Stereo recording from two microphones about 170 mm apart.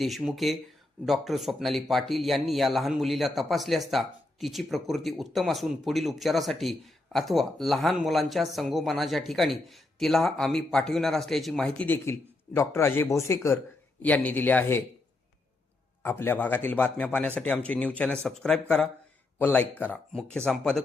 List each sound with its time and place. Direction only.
0.0 s speech: centre (ahead or behind)
16.0 s speech: 15° left (ahead or behind)